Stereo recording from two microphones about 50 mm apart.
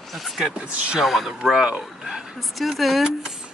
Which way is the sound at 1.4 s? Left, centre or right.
Centre.